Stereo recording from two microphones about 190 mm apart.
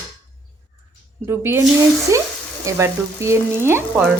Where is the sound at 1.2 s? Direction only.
10° right (ahead or behind).